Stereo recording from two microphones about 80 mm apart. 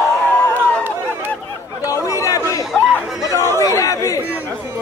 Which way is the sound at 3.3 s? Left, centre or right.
Right.